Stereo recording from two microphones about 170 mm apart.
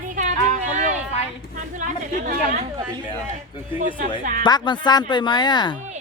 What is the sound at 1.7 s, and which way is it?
Speech, 50° right (ahead or behind).